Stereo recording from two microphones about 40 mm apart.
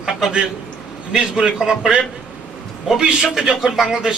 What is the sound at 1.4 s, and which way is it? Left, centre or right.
Speech, centre.